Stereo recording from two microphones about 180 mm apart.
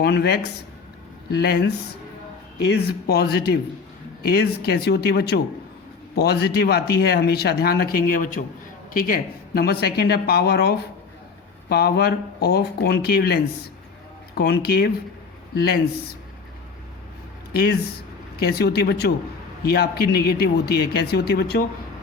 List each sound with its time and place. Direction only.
0.0 s speech: 65° left (ahead or behind)
17.5 s speech: 60° left (ahead or behind)